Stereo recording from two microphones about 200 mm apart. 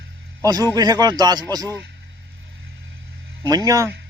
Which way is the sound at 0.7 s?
20° right (ahead or behind).